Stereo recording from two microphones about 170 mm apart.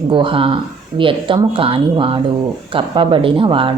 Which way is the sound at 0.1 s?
30° right (ahead or behind).